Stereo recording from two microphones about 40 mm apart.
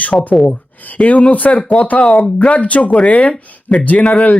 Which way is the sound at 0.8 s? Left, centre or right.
Left.